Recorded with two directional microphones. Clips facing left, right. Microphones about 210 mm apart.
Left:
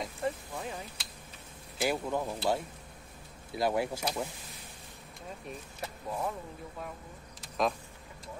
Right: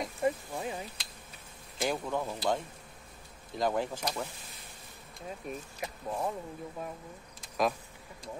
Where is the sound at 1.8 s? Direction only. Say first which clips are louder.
Left 1 dB; 10° left (ahead or behind).